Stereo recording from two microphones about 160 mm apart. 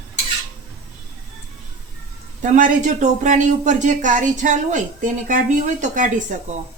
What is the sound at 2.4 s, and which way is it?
Speech, 50° right (ahead or behind).